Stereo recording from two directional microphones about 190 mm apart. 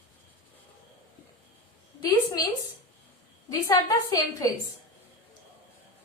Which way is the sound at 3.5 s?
15° left (ahead or behind).